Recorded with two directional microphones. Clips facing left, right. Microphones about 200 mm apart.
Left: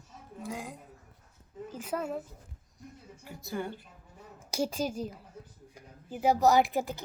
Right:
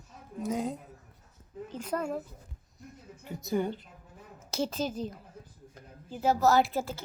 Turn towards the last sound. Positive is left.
turn(degrees=15)  # may be behind; listen again after turning